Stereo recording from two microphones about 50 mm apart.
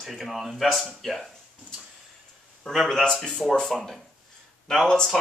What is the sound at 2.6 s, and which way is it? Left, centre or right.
Speech, centre.